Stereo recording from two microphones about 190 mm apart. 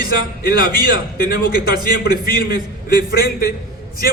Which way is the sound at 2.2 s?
50° left (ahead or behind).